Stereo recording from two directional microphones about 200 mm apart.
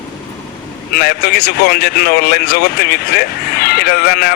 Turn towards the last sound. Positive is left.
turn(degrees=50)  # may be behind; listen again after turning